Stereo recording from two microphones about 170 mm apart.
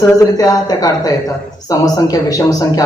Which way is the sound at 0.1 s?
20° left (ahead or behind).